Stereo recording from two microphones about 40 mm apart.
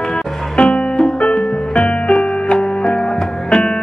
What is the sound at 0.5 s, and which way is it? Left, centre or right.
Music, left.